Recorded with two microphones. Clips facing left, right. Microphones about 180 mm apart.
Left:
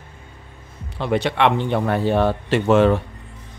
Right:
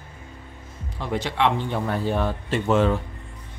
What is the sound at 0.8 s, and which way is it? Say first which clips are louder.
Speech: left 7 dB; 70° left (ahead or behind).